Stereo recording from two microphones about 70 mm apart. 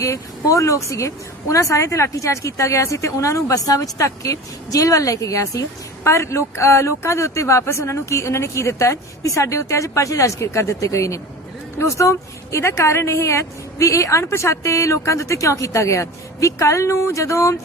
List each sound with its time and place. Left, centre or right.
0.0 s speech: left